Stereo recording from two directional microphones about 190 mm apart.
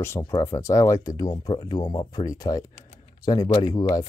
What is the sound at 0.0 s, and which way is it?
Speech, 15° left (ahead or behind).